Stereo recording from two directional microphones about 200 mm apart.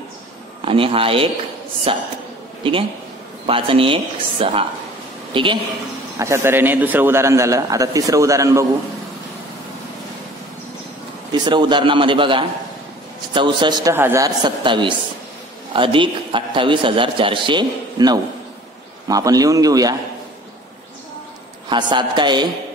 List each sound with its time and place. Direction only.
0.7 s a man's voice: 25° right (ahead or behind)
3.4 s a man's voice: 25° right (ahead or behind)
6.1 s a man's voice: 15° right (ahead or behind)
11.3 s a man's voice: 20° right (ahead or behind)
21.6 s a man's voice: 20° right (ahead or behind)